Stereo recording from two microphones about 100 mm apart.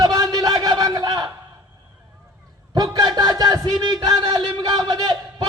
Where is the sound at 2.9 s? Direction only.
45° right (ahead or behind).